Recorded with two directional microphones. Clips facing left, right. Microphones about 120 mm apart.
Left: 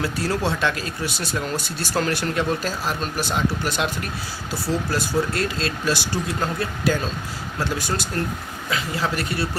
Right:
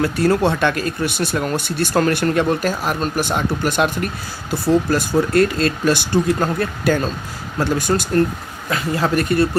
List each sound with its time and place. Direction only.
0.0 s speech: 55° right (ahead or behind)